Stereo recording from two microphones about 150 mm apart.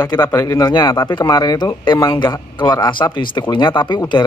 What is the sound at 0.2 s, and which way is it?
Speech, 20° left (ahead or behind).